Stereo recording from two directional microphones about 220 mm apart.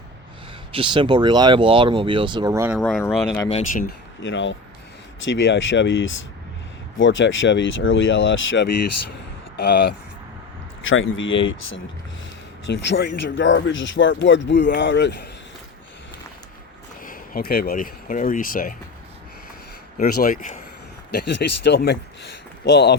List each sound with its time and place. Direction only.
0.7 s speech: 25° right (ahead or behind)
2.7 s speech: centre (ahead or behind)
3.7 s speech: 40° left (ahead or behind)
4.2 s speech: 55° left (ahead or behind)
9.6 s speech: 45° left (ahead or behind)
10.8 s speech: 60° left (ahead or behind)
17.0 s speech: 40° left (ahead or behind)
20.0 s speech: 40° left (ahead or behind)
21.1 s speech: 50° left (ahead or behind)